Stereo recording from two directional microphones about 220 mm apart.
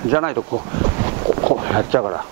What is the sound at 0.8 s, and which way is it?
Boat, 25° right (ahead or behind).